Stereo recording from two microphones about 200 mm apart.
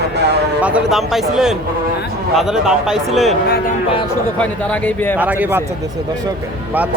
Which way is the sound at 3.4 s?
50° left (ahead or behind).